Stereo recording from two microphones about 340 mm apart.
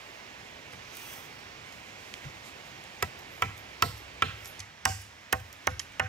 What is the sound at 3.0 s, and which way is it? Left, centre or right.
Tick-tock, centre.